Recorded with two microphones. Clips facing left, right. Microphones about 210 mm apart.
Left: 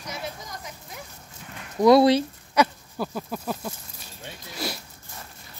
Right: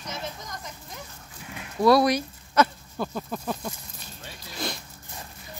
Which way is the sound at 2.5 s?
10° left (ahead or behind).